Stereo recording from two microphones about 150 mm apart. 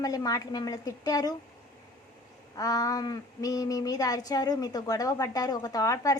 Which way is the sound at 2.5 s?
25° left (ahead or behind).